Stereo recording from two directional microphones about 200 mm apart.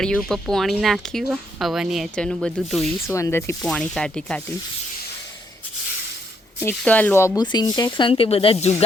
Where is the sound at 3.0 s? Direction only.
15° left (ahead or behind).